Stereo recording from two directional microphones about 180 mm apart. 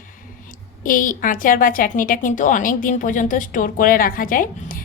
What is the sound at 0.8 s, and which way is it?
A woman's voice, 50° left (ahead or behind).